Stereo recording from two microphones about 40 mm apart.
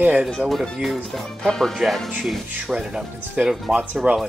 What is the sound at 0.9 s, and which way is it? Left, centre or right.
Speech, centre.